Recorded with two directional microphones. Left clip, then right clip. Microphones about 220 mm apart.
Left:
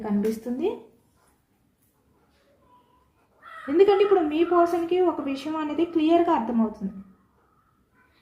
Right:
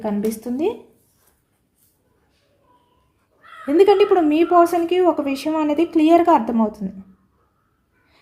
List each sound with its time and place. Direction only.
0.0 s a woman's voice: 50° right (ahead or behind)
3.7 s a woman's voice: 50° right (ahead or behind)